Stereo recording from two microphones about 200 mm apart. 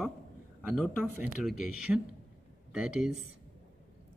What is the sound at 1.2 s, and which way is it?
Speech, centre (ahead or behind).